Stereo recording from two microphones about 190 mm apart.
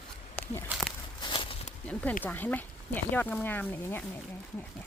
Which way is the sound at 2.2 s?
10° left (ahead or behind).